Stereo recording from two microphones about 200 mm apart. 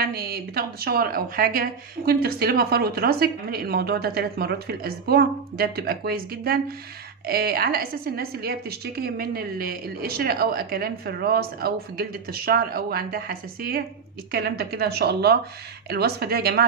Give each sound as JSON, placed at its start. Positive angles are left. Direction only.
{"t": 0.0, "sound": "a woman's voice", "side_deg": -50}